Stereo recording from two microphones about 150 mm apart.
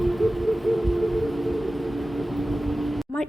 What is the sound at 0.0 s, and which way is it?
Music, centre (ahead or behind).